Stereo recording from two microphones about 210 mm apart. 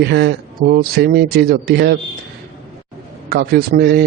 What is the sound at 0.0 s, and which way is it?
Speech, 50° right (ahead or behind).